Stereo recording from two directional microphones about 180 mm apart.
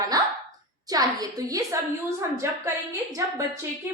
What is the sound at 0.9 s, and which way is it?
A woman's voice, 20° right (ahead or behind).